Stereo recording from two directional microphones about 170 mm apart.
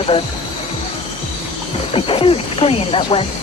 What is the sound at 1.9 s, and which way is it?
Speech, 30° left (ahead or behind).